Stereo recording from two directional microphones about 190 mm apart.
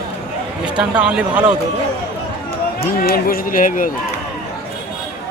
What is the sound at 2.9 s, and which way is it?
Speech, 50° left (ahead or behind).